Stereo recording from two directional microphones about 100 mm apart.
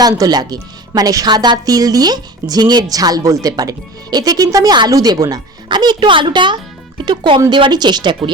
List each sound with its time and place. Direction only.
0.0 s a woman's voice: 40° right (ahead or behind)